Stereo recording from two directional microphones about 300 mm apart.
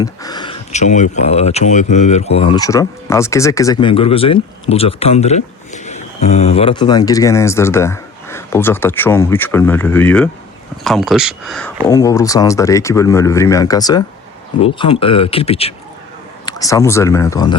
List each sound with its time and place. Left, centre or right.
0.0 s speech: centre
11.9 s speech: centre